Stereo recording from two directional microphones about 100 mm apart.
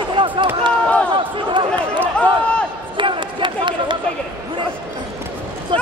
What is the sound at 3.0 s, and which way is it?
Run, 55° right (ahead or behind).